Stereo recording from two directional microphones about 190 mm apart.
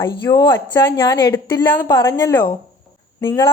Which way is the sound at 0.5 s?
15° left (ahead or behind).